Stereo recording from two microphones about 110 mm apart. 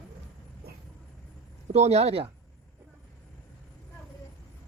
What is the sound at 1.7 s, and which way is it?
Speech, 75° right (ahead or behind).